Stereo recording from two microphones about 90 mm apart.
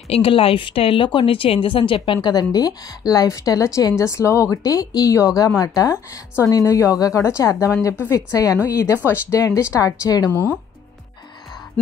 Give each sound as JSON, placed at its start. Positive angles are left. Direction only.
{"t": 0.1, "sound": "a woman's voice", "side_deg": 90}